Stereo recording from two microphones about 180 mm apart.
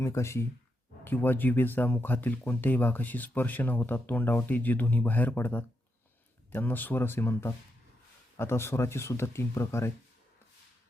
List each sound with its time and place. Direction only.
0.0 s speech: 15° left (ahead or behind)